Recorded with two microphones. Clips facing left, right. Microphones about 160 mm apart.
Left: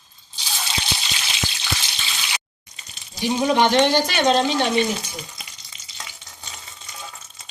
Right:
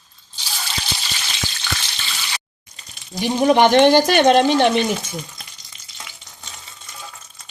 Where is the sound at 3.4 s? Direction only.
60° right (ahead or behind).